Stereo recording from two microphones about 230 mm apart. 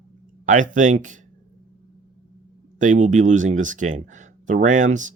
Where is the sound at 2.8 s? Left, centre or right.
Right.